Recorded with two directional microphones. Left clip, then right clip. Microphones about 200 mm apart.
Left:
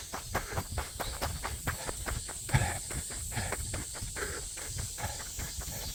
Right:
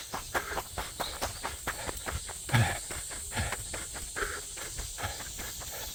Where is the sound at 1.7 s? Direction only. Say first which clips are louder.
Right 1 dB; centre (ahead or behind).